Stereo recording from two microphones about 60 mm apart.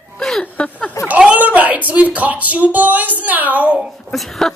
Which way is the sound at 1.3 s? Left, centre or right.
Right.